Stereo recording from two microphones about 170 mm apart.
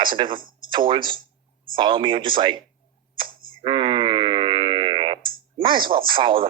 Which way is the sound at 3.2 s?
30° right (ahead or behind).